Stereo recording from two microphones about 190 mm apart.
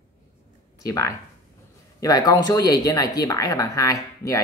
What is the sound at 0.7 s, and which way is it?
Speech, 15° left (ahead or behind).